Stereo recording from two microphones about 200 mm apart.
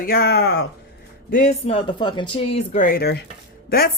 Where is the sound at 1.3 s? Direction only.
35° left (ahead or behind).